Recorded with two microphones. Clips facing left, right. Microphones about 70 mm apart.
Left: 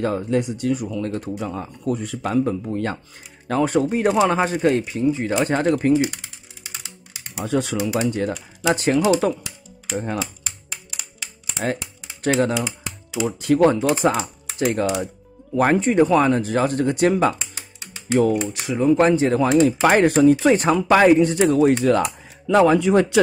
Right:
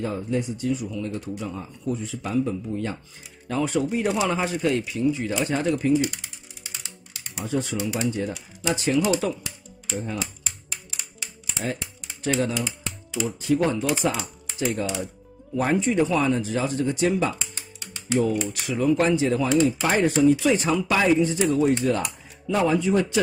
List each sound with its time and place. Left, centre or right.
0.0 s speech: left
7.3 s speech: left
8.3 s speech: left
11.5 s typing: left
13.1 s speech: left
14.6 s speech: left
18.5 s speech: left
18.9 s speech: left
19.8 s speech: left
20.2 s speech: left